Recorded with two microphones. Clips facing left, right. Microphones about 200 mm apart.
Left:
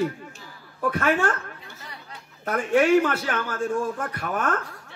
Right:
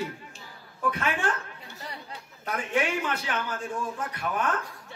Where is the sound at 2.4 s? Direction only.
50° left (ahead or behind).